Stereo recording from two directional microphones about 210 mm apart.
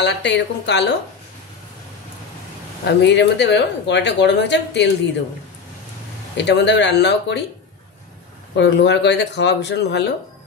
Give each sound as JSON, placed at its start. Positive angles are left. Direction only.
{"t": 0.0, "sound": "speech", "side_deg": 55}
{"t": 2.8, "sound": "speech", "side_deg": 55}
{"t": 6.3, "sound": "speech", "side_deg": 55}
{"t": 8.5, "sound": "speech", "side_deg": 55}